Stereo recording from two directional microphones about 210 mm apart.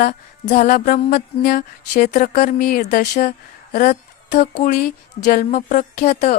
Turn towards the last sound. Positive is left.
turn(degrees=30)  # may be behind; listen again after turning